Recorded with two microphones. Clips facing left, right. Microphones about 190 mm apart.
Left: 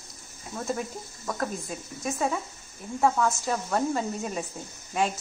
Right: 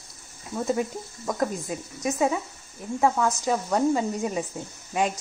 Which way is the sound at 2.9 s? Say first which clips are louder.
Right 1 dB; 10° right (ahead or behind).